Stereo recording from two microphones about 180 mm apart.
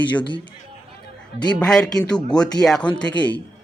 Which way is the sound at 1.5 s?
5° left (ahead or behind).